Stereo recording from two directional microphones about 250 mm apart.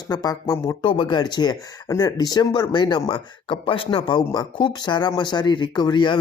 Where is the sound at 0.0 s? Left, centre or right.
Centre.